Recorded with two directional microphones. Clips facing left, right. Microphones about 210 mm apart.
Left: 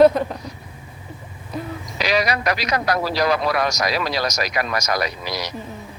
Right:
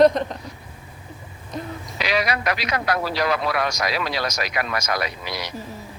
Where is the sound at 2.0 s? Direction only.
40° left (ahead or behind).